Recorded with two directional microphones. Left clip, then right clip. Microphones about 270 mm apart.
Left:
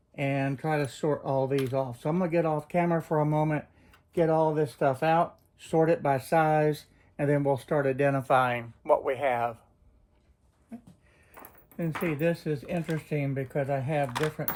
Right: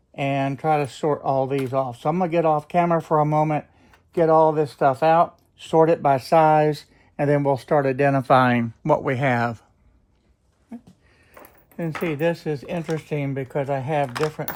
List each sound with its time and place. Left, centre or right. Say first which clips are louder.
0.2 s speech: right 7 dB; right
11.8 s speech: right 5 dB; right